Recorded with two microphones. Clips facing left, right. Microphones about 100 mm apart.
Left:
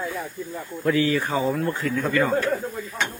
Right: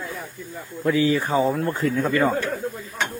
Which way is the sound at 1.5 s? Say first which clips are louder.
Right 2 dB; 30° right (ahead or behind).